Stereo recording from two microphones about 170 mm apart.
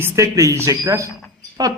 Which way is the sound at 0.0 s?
20° right (ahead or behind).